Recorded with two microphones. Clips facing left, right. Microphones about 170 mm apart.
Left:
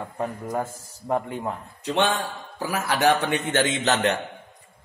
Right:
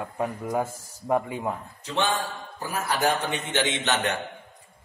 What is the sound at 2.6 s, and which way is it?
Speech, 90° left.